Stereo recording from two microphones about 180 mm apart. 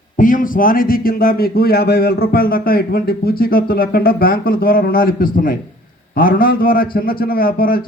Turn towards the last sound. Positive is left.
turn(degrees=55)  # may be behind; listen again after turning